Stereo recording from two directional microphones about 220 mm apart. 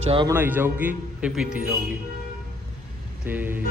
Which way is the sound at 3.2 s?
10° right (ahead or behind).